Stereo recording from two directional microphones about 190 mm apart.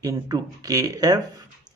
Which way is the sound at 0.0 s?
20° right (ahead or behind).